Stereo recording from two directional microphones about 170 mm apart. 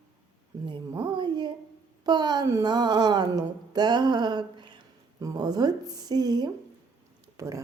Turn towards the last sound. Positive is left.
turn(degrees=-20)  # may be behind; listen again after turning